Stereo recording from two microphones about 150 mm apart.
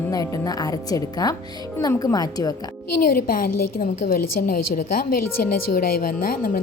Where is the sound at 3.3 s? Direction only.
70° left (ahead or behind).